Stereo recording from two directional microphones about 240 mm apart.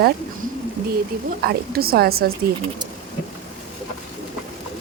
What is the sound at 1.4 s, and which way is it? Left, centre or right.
Speech, right.